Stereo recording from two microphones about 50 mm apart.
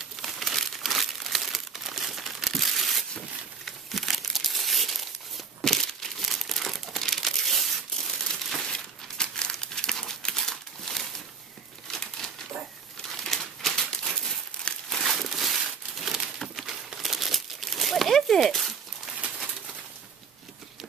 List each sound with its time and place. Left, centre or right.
0.2 s crumpling: centre
8.6 s crumpling: centre
13.1 s crumpling: centre
15.1 s a sound: centre
16.6 s crumpling: centre